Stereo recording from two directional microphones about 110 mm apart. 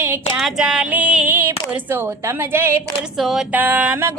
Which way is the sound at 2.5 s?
25° right (ahead or behind).